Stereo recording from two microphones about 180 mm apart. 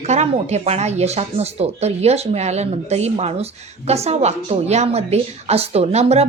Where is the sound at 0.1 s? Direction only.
40° right (ahead or behind).